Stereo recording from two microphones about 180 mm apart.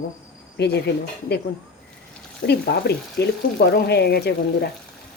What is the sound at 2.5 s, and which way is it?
Speech, 65° left (ahead or behind).